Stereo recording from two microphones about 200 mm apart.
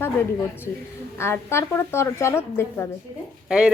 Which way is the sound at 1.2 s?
10° left (ahead or behind).